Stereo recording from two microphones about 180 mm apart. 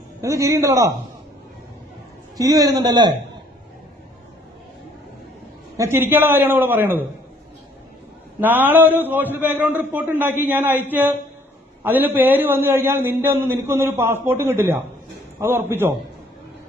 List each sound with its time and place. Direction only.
0.2 s a man's voice: 15° right (ahead or behind)
2.4 s a man's voice: 20° right (ahead or behind)
5.7 s a man's voice: 15° right (ahead or behind)
8.4 s a man's voice: 10° right (ahead or behind)